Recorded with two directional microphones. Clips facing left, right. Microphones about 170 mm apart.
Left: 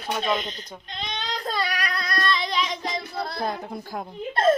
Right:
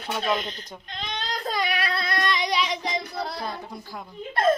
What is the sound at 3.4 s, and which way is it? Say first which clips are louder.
Speech: left 4 dB; 50° left (ahead or behind).